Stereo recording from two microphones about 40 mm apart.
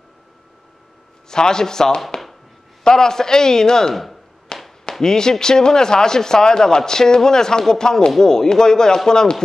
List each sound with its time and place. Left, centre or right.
1.3 s speech: centre
3.9 s speech: centre
4.5 s a sound: left
5.0 s speech: centre